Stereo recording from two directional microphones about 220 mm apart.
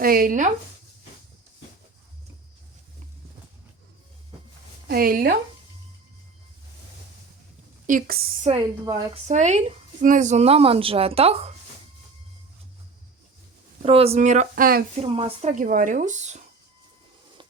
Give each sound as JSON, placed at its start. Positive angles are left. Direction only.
{"t": 0.0, "sound": "speech", "side_deg": -40}
{"t": 4.9, "sound": "speech", "side_deg": -40}
{"t": 7.9, "sound": "speech", "side_deg": -40}
{"t": 8.5, "sound": "a woman's voice", "side_deg": -15}
{"t": 9.2, "sound": "a woman's voice", "side_deg": -30}
{"t": 13.8, "sound": "speech", "side_deg": -25}
{"t": 14.9, "sound": "speech", "side_deg": -25}